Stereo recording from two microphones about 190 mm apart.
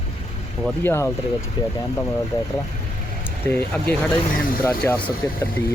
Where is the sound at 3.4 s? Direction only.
10° left (ahead or behind).